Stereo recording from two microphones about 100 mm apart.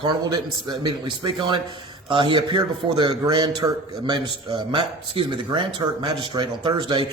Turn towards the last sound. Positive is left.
turn(degrees=-50)  # may be behind; listen again after turning